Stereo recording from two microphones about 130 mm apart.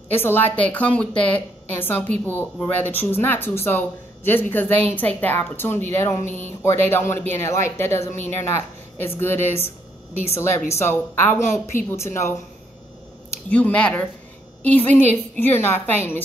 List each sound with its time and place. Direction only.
0.1 s a woman's voice: 15° left (ahead or behind)
10.8 s a woman's voice: 15° left (ahead or behind)
13.5 s speech: 10° left (ahead or behind)